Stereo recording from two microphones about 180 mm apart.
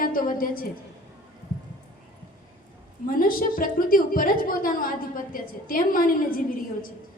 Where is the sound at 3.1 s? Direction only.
50° left (ahead or behind).